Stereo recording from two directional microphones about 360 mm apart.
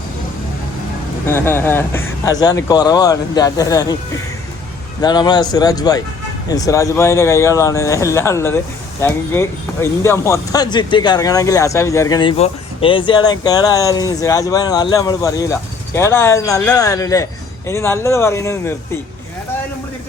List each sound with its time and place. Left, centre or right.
1.3 s speech: centre
4.9 s speech: centre